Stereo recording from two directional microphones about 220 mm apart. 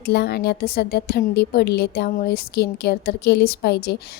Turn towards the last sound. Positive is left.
turn(degrees=50)  # may be behind; listen again after turning